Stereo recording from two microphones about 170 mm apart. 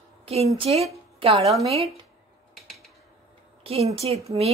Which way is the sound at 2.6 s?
Centre (ahead or behind).